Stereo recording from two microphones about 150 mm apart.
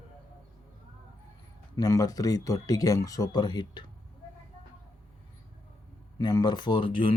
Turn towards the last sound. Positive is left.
turn(degrees=30)  # may be behind; listen again after turning